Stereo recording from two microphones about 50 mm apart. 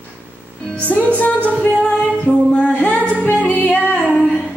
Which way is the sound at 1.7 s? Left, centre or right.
Centre.